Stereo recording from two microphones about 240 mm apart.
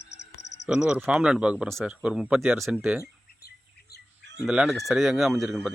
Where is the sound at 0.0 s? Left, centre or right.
Left.